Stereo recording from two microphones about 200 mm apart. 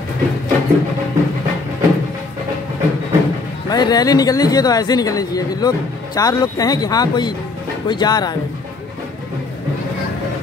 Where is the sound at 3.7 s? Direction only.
20° left (ahead or behind).